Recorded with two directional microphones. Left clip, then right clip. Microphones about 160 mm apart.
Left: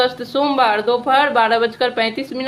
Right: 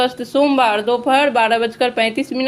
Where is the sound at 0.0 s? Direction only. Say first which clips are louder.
Right 1 dB; 35° right (ahead or behind).